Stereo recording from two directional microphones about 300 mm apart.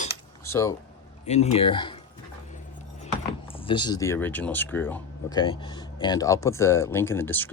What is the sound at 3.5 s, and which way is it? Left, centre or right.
Speech, centre.